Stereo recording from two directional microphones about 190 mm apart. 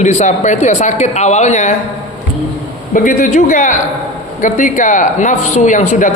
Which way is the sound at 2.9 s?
45° left (ahead or behind).